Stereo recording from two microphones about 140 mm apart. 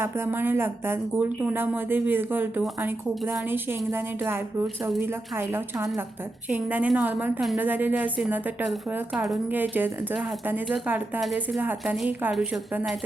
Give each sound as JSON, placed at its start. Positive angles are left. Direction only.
{"t": 0.0, "sound": "speech", "side_deg": -15}
{"t": 9.5, "sound": "speech", "side_deg": -15}